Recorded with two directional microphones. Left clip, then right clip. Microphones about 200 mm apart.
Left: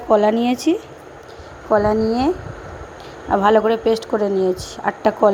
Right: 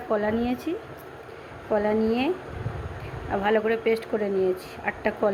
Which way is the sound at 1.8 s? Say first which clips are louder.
Left 6 dB; 25° left (ahead or behind).